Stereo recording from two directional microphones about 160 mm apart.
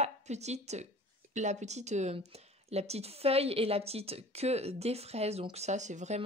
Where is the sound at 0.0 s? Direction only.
45° right (ahead or behind).